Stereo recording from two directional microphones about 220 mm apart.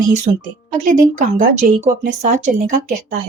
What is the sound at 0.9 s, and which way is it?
Speech, 40° right (ahead or behind).